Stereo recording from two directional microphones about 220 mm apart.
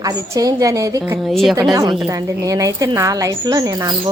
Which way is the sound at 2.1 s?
15° right (ahead or behind).